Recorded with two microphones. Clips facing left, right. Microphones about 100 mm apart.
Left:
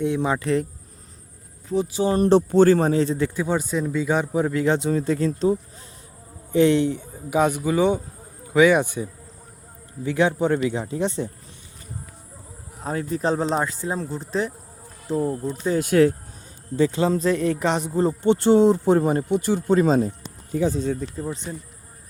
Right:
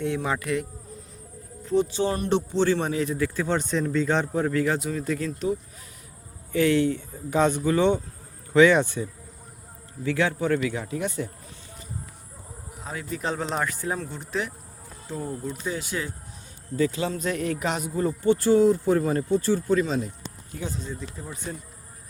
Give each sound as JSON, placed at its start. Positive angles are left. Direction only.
{"t": 0.0, "sound": "a man's voice", "side_deg": 20}
{"t": 1.6, "sound": "speech", "side_deg": 5}
{"t": 2.1, "sound": "speech", "side_deg": 35}
{"t": 3.4, "sound": "a man's voice", "side_deg": 10}
{"t": 12.8, "sound": "speech", "side_deg": 40}
{"t": 15.8, "sound": "speech", "side_deg": 60}
{"t": 16.7, "sound": "a man's voice", "side_deg": 30}
{"t": 19.8, "sound": "speech", "side_deg": 40}
{"t": 21.2, "sound": "a man's voice", "side_deg": 20}